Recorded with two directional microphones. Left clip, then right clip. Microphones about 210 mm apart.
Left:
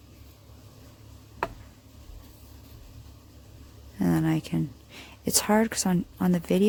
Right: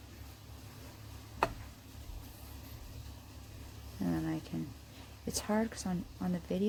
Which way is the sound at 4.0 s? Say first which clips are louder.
Left 10 dB; 40° left (ahead or behind).